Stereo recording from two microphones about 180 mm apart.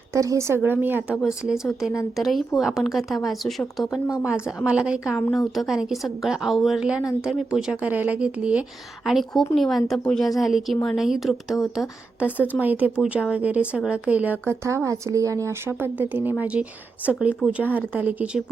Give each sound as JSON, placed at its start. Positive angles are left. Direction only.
{"t": 0.1, "sound": "a woman's voice", "side_deg": -15}